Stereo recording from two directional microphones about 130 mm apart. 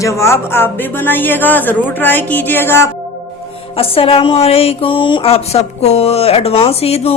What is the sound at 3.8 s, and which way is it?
Speech, 45° left (ahead or behind).